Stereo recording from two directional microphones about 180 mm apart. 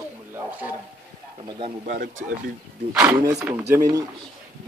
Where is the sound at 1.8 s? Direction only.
50° right (ahead or behind).